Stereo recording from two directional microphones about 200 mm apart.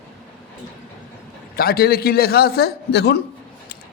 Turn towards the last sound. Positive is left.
turn(degrees=55)  # may be behind; listen again after turning